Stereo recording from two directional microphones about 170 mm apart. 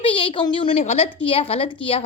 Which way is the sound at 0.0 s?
30° left (ahead or behind).